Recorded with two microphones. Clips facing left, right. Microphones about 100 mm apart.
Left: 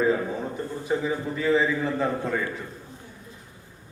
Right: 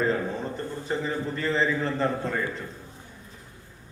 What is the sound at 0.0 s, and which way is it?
A man's voice, 10° left (ahead or behind).